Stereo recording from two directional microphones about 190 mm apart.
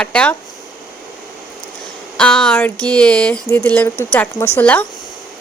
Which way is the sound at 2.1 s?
5° left (ahead or behind).